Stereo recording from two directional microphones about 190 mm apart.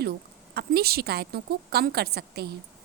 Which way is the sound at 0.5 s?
55° right (ahead or behind).